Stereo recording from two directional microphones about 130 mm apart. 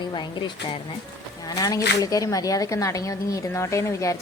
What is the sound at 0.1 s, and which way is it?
Speech, 35° left (ahead or behind).